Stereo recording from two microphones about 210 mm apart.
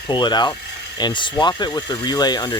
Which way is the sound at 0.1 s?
20° left (ahead or behind).